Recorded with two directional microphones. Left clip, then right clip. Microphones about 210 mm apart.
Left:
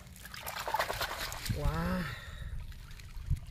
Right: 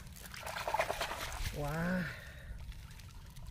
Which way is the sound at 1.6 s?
40° left (ahead or behind).